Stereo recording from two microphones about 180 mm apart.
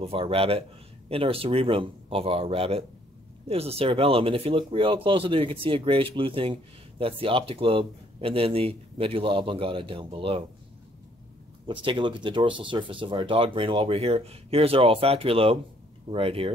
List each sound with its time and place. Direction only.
0.0 s speech: 30° right (ahead or behind)
11.6 s speech: 30° right (ahead or behind)